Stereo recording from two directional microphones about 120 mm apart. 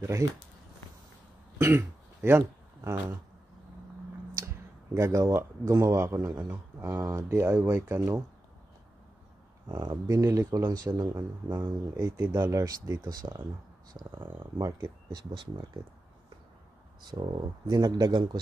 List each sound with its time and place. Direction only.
1.6 s throat clearing: 20° right (ahead or behind)
4.9 s speech: 25° right (ahead or behind)
9.7 s speech: 30° right (ahead or behind)
17.1 s speech: 40° right (ahead or behind)